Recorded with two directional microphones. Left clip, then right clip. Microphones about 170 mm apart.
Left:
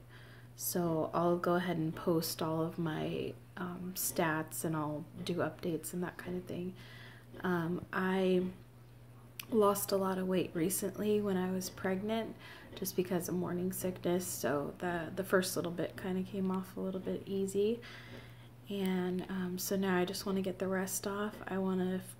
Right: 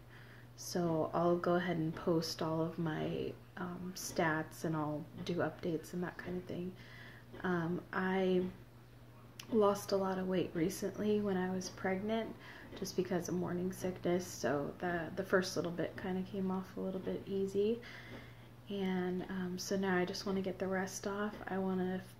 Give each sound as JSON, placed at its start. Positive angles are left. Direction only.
{"t": 0.6, "sound": "speech", "side_deg": 10}
{"t": 9.6, "sound": "speech", "side_deg": 10}